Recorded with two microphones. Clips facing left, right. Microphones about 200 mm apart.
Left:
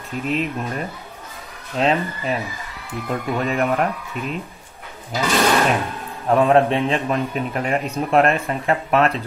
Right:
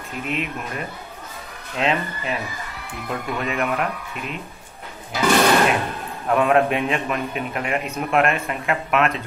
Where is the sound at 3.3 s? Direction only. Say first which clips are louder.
Left 4 dB; 35° left (ahead or behind).